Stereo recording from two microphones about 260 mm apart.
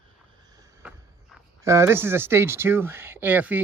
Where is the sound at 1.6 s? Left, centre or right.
Centre.